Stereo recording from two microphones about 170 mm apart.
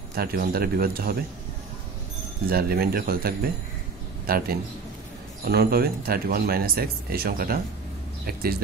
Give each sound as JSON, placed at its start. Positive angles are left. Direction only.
{"t": 0.1, "sound": "speech", "side_deg": -65}
{"t": 2.4, "sound": "speech", "side_deg": -60}
{"t": 5.5, "sound": "speech", "side_deg": -65}